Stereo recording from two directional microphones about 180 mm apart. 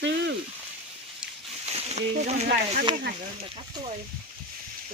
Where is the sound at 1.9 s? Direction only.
35° right (ahead or behind).